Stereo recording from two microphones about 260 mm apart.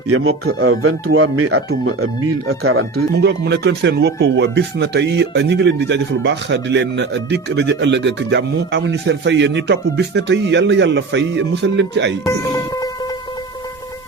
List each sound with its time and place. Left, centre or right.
0.6 s speech: right
2.9 s speech: right
12.2 s speech: centre